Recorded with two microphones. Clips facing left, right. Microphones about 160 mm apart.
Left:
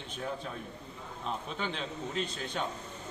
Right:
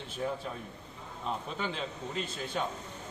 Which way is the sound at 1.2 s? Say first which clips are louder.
Right 1 dB; 5° right (ahead or behind).